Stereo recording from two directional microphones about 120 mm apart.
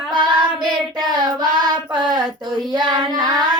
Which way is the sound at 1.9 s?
35° right (ahead or behind).